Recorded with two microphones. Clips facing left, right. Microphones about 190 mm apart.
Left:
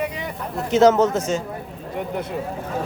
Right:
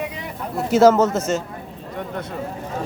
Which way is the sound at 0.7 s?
Centre (ahead or behind).